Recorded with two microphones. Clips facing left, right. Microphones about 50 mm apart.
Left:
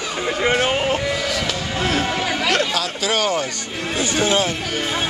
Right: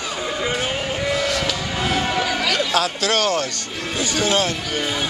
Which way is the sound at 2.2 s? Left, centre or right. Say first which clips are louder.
Even; left.